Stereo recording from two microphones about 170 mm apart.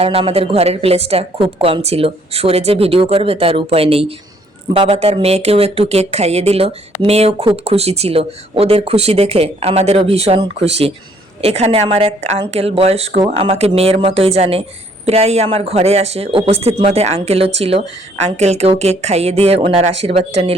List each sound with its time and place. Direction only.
0.0 s speech: 35° right (ahead or behind)